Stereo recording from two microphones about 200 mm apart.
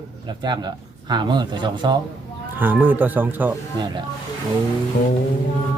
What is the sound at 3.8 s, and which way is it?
Speech, 20° right (ahead or behind).